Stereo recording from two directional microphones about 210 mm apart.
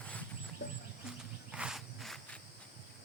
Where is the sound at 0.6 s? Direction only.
55° left (ahead or behind).